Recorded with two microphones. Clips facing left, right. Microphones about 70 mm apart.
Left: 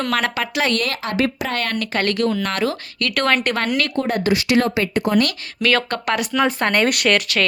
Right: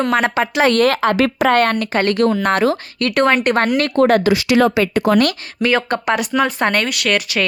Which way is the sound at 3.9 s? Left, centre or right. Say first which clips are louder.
Right 9 dB; right.